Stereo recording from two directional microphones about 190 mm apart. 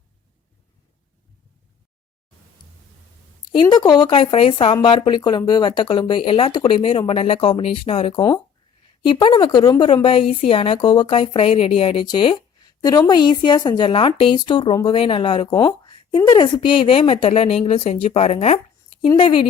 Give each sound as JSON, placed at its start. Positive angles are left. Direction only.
{"t": 3.5, "sound": "a woman's voice", "side_deg": 25}